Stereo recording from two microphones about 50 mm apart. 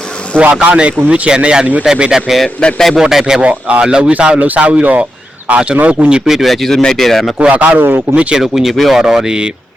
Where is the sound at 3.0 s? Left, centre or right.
Centre.